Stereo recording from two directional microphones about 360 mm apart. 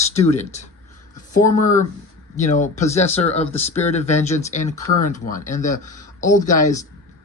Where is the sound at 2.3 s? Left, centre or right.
Centre.